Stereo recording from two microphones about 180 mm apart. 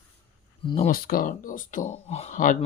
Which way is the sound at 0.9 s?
55° left (ahead or behind).